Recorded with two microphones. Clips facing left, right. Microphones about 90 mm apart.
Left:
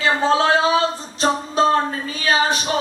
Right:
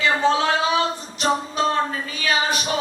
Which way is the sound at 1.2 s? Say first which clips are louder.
Left 2 dB; 35° left (ahead or behind).